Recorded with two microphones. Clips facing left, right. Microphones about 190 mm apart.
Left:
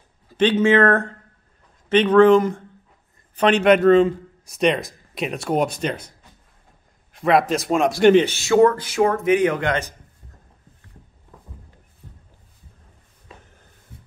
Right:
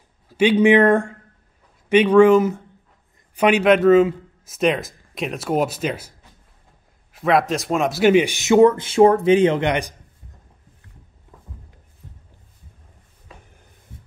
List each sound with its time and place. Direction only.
0.3 s a man's voice: 10° right (ahead or behind)